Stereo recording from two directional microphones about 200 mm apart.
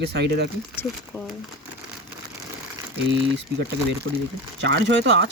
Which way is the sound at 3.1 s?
60° right (ahead or behind).